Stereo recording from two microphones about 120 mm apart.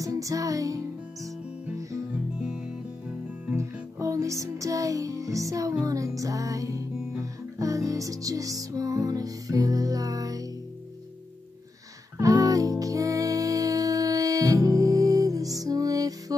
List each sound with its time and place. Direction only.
0.0 s music: 30° right (ahead or behind)
3.5 s music: 25° right (ahead or behind)
12.2 s music: 30° right (ahead or behind)